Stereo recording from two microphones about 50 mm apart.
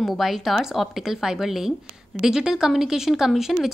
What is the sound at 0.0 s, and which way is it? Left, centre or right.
A woman's voice, centre.